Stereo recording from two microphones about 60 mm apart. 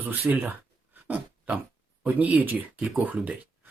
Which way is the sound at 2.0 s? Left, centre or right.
Right.